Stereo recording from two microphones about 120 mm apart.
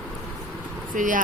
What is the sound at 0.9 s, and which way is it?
Speech, 90° right.